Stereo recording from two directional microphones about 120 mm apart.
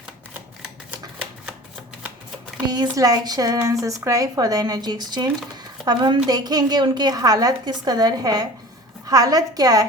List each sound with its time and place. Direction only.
2.6 s a woman's voice: 35° right (ahead or behind)